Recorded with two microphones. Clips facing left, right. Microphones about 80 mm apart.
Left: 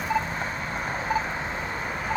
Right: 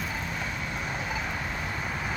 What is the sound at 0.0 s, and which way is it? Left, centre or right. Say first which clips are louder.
Vehicle: left 6 dB; left.